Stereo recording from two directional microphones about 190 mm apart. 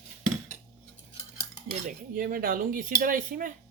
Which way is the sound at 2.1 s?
50° right (ahead or behind).